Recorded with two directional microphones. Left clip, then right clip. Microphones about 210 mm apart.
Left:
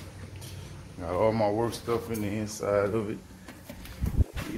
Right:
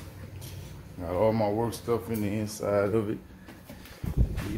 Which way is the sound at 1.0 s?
15° right (ahead or behind).